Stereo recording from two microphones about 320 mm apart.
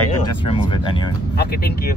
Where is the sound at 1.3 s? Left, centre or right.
Left.